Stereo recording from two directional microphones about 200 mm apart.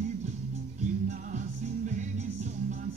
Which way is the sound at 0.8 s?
35° right (ahead or behind).